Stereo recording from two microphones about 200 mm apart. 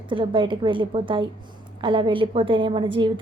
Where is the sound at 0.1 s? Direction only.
25° right (ahead or behind).